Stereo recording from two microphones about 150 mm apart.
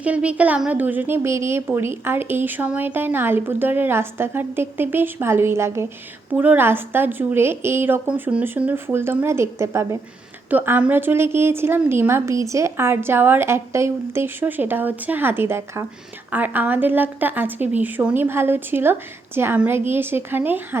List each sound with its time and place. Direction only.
0.0 s a woman's voice: 10° right (ahead or behind)